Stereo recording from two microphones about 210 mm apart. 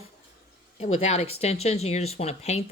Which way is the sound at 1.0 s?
30° left (ahead or behind).